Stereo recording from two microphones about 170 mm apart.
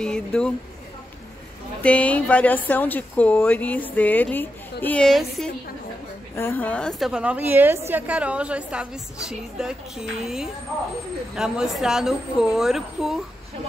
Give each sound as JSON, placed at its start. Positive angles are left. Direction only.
{"t": 0.0, "sound": "a woman's voice", "side_deg": 5}
{"t": 1.8, "sound": "a woman's voice", "side_deg": 5}